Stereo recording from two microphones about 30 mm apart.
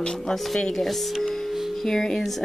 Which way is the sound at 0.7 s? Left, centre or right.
Centre.